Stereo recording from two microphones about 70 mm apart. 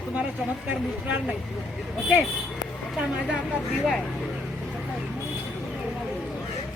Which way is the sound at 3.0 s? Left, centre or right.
Centre.